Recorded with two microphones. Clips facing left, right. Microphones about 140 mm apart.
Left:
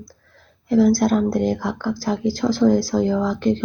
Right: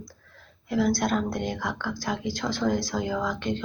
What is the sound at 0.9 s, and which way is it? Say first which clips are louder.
Speech: left 8 dB; 35° left (ahead or behind).